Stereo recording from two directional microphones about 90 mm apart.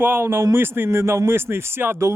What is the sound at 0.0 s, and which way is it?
Speech, 25° right (ahead or behind).